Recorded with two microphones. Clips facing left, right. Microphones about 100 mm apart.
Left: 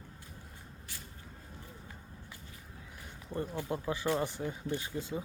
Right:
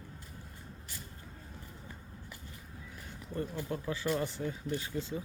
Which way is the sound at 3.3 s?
20° left (ahead or behind).